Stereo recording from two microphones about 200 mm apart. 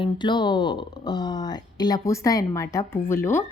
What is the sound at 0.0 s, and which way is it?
A woman's voice, 20° left (ahead or behind).